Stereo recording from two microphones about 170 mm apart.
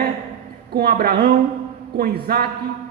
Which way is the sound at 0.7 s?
70° right (ahead or behind).